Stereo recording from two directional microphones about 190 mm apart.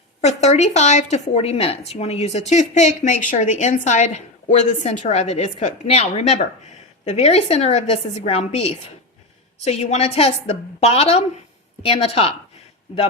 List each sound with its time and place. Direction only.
0.2 s a woman's voice: 35° left (ahead or behind)